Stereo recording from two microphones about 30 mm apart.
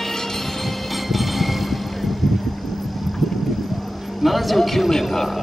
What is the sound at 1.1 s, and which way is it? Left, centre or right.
Vehicle, centre.